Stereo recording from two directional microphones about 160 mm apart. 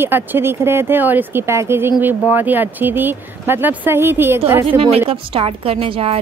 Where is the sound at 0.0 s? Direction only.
15° right (ahead or behind).